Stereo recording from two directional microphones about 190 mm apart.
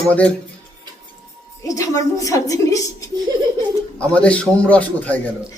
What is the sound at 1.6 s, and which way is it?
A woman's voice, 15° left (ahead or behind).